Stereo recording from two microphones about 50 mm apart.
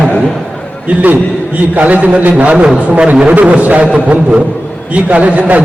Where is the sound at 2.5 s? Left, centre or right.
Centre.